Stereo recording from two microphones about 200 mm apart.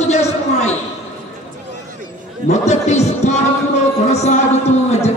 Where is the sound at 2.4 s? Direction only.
35° left (ahead or behind).